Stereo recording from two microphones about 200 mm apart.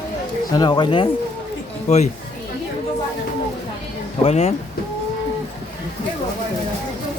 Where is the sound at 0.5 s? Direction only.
20° left (ahead or behind).